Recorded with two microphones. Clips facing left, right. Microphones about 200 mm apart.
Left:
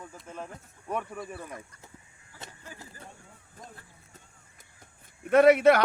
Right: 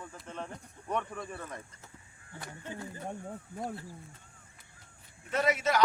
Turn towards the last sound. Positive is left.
turn(degrees=60)  # may be behind; listen again after turning